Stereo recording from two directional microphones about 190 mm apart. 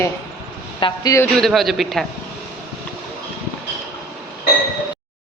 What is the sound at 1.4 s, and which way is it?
Speech, centre (ahead or behind).